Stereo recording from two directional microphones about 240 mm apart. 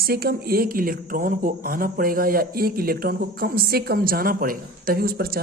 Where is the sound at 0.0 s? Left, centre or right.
Right.